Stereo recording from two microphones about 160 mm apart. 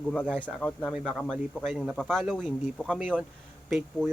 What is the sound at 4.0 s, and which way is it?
Speech, 5° left (ahead or behind).